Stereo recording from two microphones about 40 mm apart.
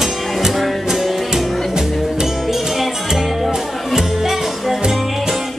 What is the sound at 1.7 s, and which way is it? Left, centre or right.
Music, centre.